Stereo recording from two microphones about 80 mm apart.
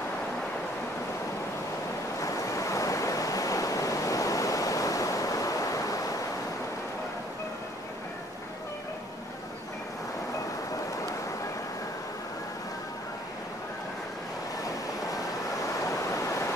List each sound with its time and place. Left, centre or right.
2.1 s waves: left
15.8 s waves: left